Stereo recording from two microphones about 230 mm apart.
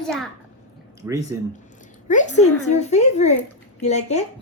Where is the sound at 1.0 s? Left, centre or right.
Centre.